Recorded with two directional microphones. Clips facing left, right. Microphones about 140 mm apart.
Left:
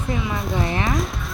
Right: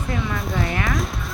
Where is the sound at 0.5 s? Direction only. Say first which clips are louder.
Left 2 dB; 25° left (ahead or behind).